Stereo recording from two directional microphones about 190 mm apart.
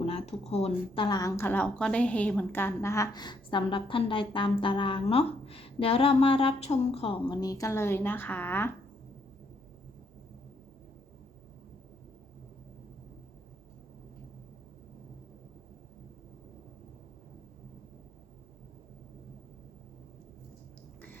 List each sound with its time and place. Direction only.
0.0 s speech: 30° left (ahead or behind); by 8.7 s 10° left (ahead or behind)